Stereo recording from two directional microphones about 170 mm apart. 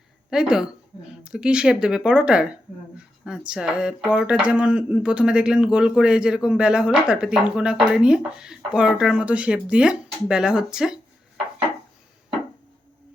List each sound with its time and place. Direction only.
0.3 s speech: 5° right (ahead or behind)